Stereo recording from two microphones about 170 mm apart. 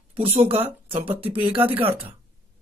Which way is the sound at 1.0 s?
10° right (ahead or behind).